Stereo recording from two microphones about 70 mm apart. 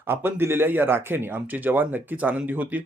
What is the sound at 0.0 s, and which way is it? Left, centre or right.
Speech, right.